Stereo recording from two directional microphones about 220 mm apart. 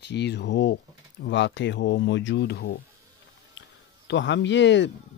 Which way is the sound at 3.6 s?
55° left (ahead or behind).